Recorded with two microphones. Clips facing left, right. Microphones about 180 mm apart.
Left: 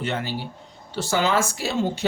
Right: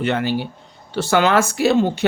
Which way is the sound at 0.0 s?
65° right (ahead or behind).